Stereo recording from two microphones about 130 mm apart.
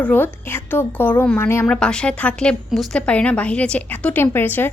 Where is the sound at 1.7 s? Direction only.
5° left (ahead or behind).